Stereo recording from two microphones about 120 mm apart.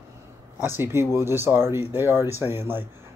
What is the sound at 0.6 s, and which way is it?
Speech, 20° right (ahead or behind).